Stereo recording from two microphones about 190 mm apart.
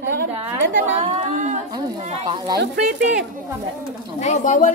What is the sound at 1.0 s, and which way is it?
Speech, 40° right (ahead or behind).